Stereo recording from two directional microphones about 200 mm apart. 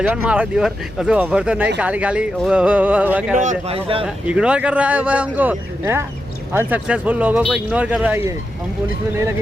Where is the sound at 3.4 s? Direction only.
40° right (ahead or behind).